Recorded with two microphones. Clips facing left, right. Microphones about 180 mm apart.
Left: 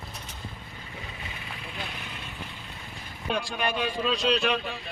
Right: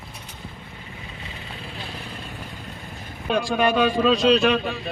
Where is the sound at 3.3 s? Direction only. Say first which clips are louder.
Right 10 dB; 90° right.